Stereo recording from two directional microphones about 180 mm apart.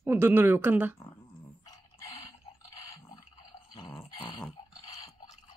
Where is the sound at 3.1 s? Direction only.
25° left (ahead or behind).